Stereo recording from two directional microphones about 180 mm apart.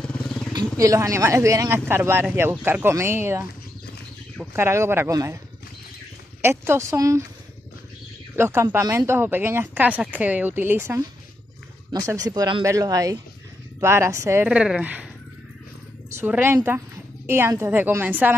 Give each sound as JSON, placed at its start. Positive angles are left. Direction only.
{"t": 0.0, "sound": "vehicle", "side_deg": 5}
{"t": 0.7, "sound": "speech", "side_deg": -20}
{"t": 4.6, "sound": "speech", "side_deg": -15}
{"t": 6.4, "sound": "speech", "side_deg": -15}
{"t": 8.4, "sound": "speech", "side_deg": -15}
{"t": 16.1, "sound": "speech", "side_deg": -10}